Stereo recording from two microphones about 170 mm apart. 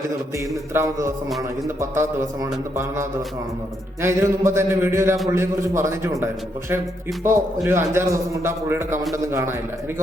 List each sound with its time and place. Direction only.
0.3 s a man's voice: 15° right (ahead or behind)
7.3 s a man's voice: 15° right (ahead or behind)